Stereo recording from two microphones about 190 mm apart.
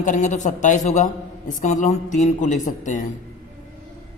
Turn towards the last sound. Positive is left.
turn(degrees=40)  # may be behind; listen again after turning